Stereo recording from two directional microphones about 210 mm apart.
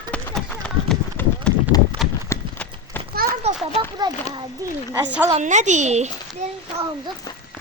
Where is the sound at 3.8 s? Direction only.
20° right (ahead or behind).